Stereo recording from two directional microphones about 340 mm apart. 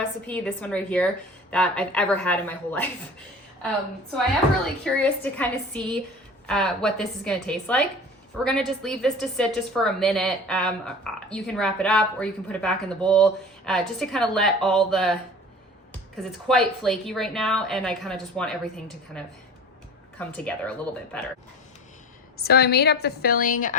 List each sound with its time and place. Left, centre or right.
0.3 s a woman's voice: centre
4.6 s a woman's voice: centre
20.1 s a woman's voice: centre
22.4 s a woman's voice: left